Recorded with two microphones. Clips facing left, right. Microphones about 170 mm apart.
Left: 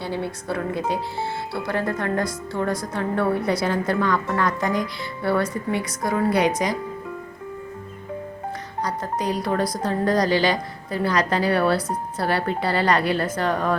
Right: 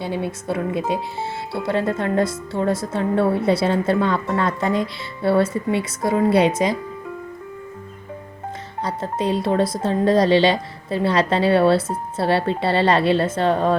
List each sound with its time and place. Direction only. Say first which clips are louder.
0.0 s speech: right 3 dB; 20° right (ahead or behind)
8.8 s speech: right 2 dB; 25° right (ahead or behind)